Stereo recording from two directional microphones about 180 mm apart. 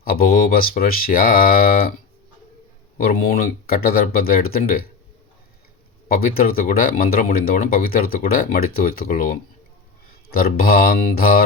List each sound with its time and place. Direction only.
0.0 s speech: 55° left (ahead or behind)
3.0 s speech: 55° left (ahead or behind)
6.1 s speech: 55° left (ahead or behind)